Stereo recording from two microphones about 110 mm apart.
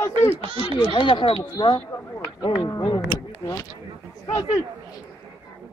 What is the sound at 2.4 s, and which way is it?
Speech, 45° left (ahead or behind).